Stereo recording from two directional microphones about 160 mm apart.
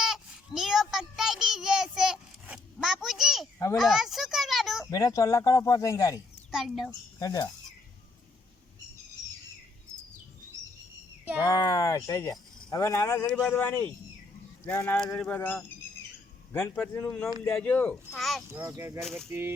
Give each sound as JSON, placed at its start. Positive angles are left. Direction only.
{"t": 0.0, "sound": "child singing", "side_deg": 0}
{"t": 3.8, "sound": "a sound", "side_deg": 0}
{"t": 4.9, "sound": "speech", "side_deg": 20}
{"t": 6.5, "sound": "a child's voice", "side_deg": -5}
{"t": 7.2, "sound": "speech", "side_deg": 20}
{"t": 11.3, "sound": "speech", "side_deg": 25}
{"t": 18.5, "sound": "speech", "side_deg": -15}
{"t": 19.0, "sound": "a child's voice", "side_deg": 5}
{"t": 19.3, "sound": "speech", "side_deg": -15}